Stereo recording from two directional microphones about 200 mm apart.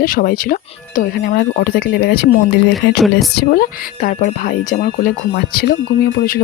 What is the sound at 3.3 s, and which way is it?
Speech, 50° left (ahead or behind).